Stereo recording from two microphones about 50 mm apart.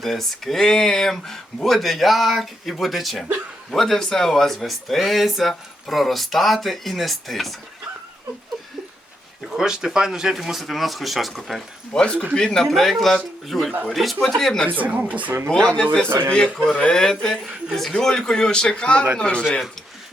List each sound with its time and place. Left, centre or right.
0.0 s speech: centre
9.5 s speech: centre
11.9 s a man's voice: centre
14.7 s speech: right
15.4 s a man's voice: centre
16.9 s a man's voice: centre